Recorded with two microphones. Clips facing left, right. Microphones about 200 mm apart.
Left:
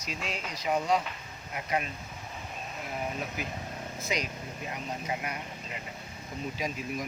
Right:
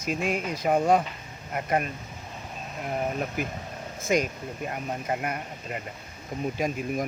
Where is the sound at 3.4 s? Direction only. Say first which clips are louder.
Right 4 dB; 50° right (ahead or behind).